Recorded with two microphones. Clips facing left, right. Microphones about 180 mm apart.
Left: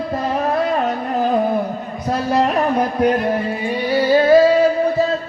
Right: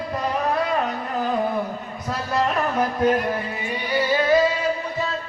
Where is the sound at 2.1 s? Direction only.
20° left (ahead or behind).